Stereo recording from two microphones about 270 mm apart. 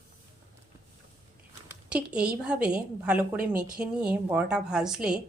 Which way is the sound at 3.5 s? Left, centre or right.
Right.